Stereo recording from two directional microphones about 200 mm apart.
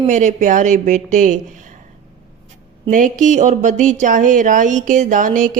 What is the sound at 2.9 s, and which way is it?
Speech, 40° right (ahead or behind).